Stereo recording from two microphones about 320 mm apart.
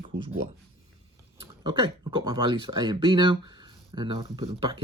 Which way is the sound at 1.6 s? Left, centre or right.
Centre.